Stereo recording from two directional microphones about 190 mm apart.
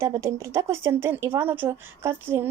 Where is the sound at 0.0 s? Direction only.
15° right (ahead or behind).